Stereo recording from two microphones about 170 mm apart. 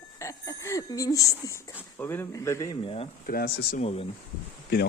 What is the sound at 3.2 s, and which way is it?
Speech, 60° left (ahead or behind).